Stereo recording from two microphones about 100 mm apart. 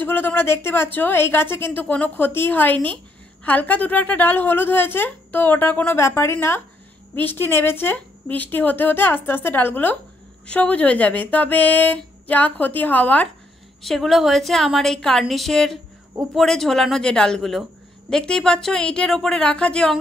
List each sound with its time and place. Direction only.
0.0 s a woman's voice: 20° left (ahead or behind)
13.8 s a woman's voice: 5° left (ahead or behind)